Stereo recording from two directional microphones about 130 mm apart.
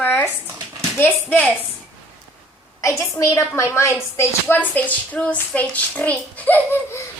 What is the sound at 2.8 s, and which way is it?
A woman's voice, 25° left (ahead or behind).